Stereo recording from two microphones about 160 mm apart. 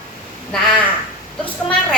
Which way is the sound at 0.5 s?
5° left (ahead or behind).